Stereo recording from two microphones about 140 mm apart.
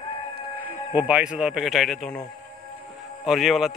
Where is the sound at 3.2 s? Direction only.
Centre (ahead or behind).